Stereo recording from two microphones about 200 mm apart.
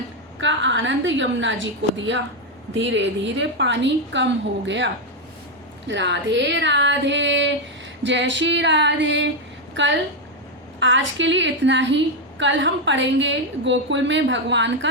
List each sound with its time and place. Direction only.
0.3 s a woman's voice: 65° right (ahead or behind)
5.9 s a woman's voice: 60° right (ahead or behind)